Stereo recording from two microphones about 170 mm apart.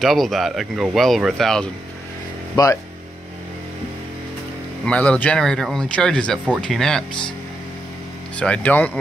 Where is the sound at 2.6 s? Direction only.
25° left (ahead or behind).